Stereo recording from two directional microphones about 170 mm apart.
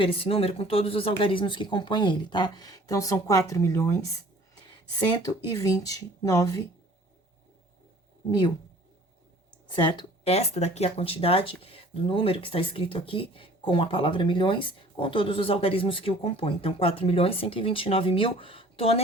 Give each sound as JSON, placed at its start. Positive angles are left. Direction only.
{"t": 0.0, "sound": "speech", "side_deg": 30}
{"t": 9.7, "sound": "speech", "side_deg": 25}
{"t": 10.2, "sound": "speech", "side_deg": 40}